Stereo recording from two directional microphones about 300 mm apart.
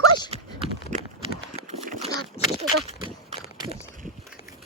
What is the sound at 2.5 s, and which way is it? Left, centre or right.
Speech, centre.